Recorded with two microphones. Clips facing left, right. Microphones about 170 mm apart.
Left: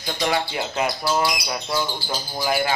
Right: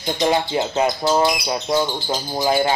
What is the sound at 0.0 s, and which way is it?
Speech, 25° right (ahead or behind).